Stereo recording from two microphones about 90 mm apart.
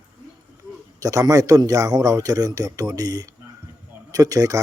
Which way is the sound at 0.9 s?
40° right (ahead or behind).